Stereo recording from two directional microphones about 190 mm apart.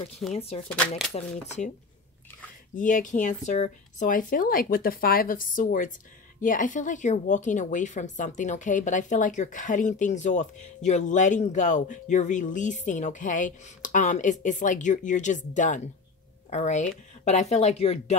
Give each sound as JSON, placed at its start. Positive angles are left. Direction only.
{"t": 0.3, "sound": "speech", "side_deg": 30}
{"t": 0.7, "sound": "speech", "side_deg": 5}
{"t": 1.1, "sound": "speech", "side_deg": 35}
{"t": 2.7, "sound": "speech", "side_deg": 45}